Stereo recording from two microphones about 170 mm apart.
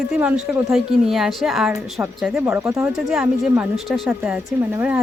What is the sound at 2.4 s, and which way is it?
Speech, 20° right (ahead or behind).